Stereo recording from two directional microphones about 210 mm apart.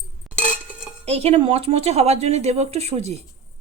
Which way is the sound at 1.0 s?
30° right (ahead or behind).